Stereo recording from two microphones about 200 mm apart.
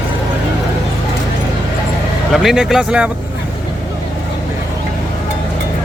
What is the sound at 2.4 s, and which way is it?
Speech, centre (ahead or behind).